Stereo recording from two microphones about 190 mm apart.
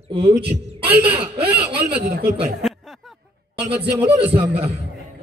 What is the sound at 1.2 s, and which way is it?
Speech, 30° right (ahead or behind).